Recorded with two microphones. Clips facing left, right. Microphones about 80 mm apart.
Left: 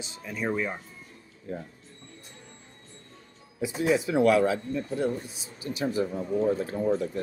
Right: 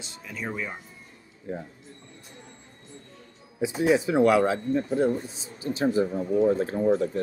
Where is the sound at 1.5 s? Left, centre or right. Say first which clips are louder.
Right 2 dB; right.